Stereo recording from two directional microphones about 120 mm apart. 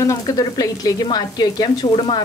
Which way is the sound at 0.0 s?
30° left (ahead or behind).